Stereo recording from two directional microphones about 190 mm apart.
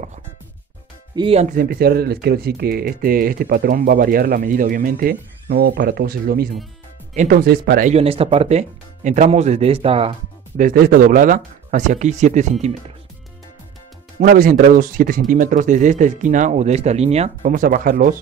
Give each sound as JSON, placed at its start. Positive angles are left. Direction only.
{"t": 1.1, "sound": "speech", "side_deg": -30}
{"t": 1.6, "sound": "speech", "side_deg": -55}
{"t": 7.9, "sound": "speech", "side_deg": -30}
{"t": 10.6, "sound": "speech", "side_deg": -50}
{"t": 14.2, "sound": "speech", "side_deg": -50}